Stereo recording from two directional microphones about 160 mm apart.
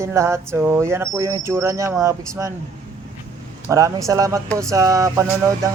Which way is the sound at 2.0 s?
20° right (ahead or behind).